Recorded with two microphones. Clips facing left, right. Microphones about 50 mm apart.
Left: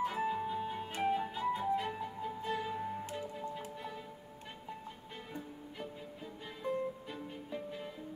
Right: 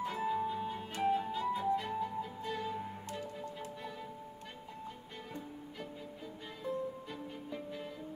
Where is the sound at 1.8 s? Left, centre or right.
Centre.